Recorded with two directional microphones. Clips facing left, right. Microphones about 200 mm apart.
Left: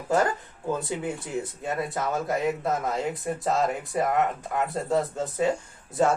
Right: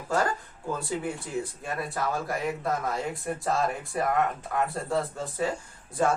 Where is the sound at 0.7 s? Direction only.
20° left (ahead or behind).